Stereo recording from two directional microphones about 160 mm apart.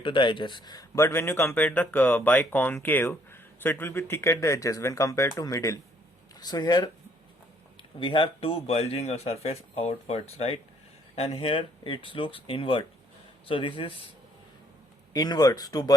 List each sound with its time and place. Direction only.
0.0 s speech: 30° left (ahead or behind)
15.1 s speech: 25° left (ahead or behind)